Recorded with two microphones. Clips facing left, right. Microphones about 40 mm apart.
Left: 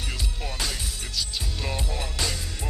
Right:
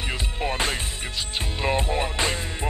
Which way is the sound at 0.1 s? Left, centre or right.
Right.